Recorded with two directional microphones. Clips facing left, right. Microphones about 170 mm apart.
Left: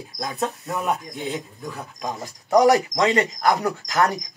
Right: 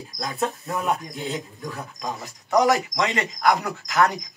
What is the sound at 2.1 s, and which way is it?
Speech, 35° left (ahead or behind).